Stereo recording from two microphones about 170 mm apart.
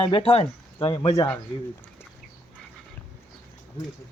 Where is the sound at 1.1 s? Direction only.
10° left (ahead or behind).